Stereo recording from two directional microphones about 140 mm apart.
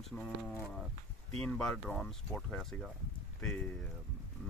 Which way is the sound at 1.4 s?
5° left (ahead or behind).